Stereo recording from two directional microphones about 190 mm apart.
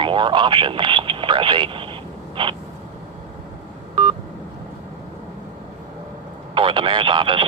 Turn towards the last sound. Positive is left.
turn(degrees=-25)  # may be behind; listen again after turning